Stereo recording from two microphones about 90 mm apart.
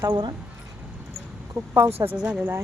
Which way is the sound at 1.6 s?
25° right (ahead or behind).